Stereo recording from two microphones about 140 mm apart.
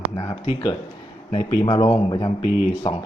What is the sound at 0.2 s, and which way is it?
Speech, 30° left (ahead or behind).